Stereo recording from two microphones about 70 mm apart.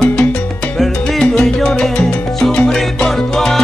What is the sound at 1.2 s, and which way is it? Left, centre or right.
Salsa music, centre.